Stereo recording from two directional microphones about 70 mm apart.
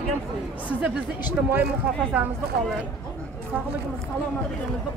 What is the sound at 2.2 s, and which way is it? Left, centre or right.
Speech, right.